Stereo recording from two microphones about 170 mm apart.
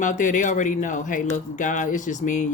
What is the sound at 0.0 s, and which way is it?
Speech, 45° left (ahead or behind).